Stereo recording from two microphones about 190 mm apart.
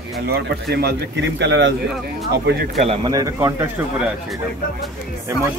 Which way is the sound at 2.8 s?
30° right (ahead or behind).